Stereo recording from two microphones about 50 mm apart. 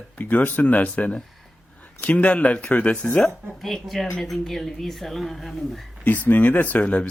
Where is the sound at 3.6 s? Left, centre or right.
Centre.